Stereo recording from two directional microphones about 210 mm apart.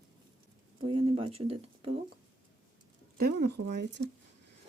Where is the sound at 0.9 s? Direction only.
25° right (ahead or behind).